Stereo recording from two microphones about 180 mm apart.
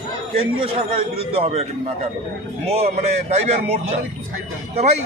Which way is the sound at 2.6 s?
35° right (ahead or behind).